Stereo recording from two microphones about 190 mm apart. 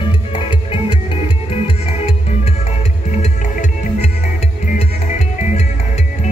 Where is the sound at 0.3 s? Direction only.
25° left (ahead or behind).